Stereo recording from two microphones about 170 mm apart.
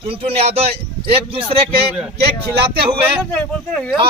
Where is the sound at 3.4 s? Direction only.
5° left (ahead or behind).